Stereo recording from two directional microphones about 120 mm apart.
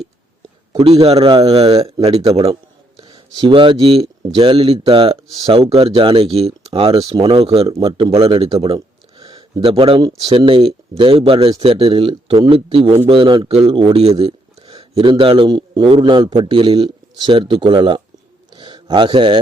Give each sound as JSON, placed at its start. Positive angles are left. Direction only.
{"t": 0.8, "sound": "speech", "side_deg": -55}
{"t": 3.0, "sound": "a man's voice", "side_deg": -40}
{"t": 5.3, "sound": "speech", "side_deg": -35}
{"t": 5.5, "sound": "a man's voice", "side_deg": -50}
{"t": 7.0, "sound": "speech", "side_deg": -30}
{"t": 7.3, "sound": "a man's voice", "side_deg": -55}
{"t": 18.5, "sound": "a sound", "side_deg": -40}